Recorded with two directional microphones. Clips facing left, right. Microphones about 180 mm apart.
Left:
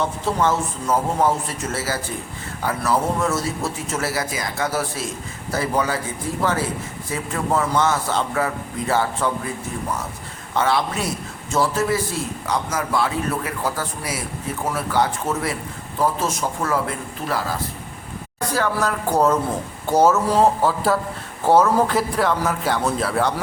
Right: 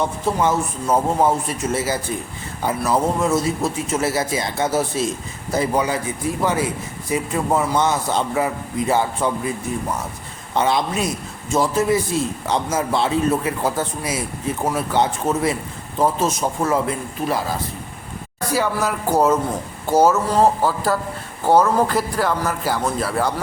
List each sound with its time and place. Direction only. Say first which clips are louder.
0.0 s a man's voice: right 1 dB; 15° right (ahead or behind)
10.5 s a man's voice: right 1 dB; 20° right (ahead or behind)
18.5 s a man's voice: right 1 dB; 10° right (ahead or behind)